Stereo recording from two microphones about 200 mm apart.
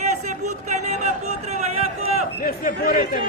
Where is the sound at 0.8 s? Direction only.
35° right (ahead or behind).